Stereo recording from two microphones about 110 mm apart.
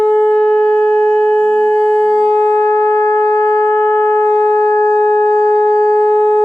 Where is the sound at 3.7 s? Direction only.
20° left (ahead or behind).